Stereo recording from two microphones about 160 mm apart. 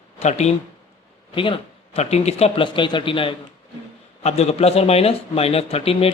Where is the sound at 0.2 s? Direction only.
45° left (ahead or behind).